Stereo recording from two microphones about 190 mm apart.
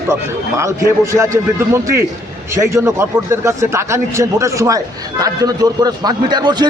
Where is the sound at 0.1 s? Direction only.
15° right (ahead or behind).